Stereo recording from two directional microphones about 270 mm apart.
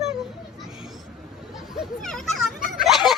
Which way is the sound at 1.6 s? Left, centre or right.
Centre.